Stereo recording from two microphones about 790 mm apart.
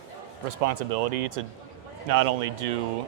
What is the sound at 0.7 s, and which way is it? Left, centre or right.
A man's voice, right.